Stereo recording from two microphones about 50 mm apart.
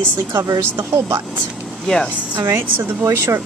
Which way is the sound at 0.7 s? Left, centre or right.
Right.